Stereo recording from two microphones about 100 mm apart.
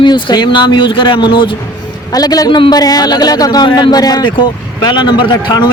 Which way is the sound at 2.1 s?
40° left (ahead or behind).